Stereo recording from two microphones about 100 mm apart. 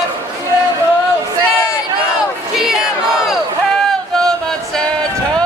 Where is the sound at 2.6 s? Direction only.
5° right (ahead or behind).